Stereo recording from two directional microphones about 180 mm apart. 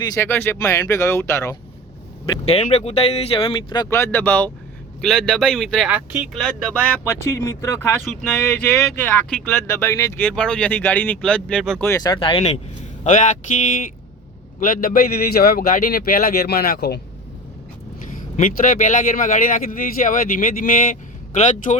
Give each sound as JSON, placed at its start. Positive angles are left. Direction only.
{"t": 0.0, "sound": "speech", "side_deg": 15}
{"t": 2.5, "sound": "speech", "side_deg": 35}
{"t": 3.8, "sound": "speech", "side_deg": 15}
{"t": 6.3, "sound": "speech", "side_deg": 5}
{"t": 11.9, "sound": "speech", "side_deg": 20}
{"t": 13.1, "sound": "speech", "side_deg": 45}
{"t": 14.6, "sound": "a man's voice", "side_deg": 50}
{"t": 18.3, "sound": "speech", "side_deg": 50}